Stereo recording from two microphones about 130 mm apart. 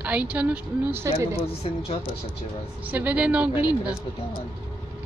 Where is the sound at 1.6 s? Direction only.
50° left (ahead or behind).